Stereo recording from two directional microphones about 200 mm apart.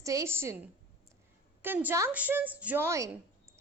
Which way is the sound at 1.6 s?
10° right (ahead or behind).